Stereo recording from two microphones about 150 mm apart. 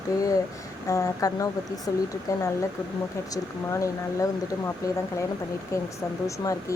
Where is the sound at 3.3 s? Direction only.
20° left (ahead or behind).